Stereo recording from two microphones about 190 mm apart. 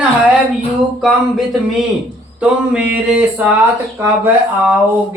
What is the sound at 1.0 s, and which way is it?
Speech, centre (ahead or behind).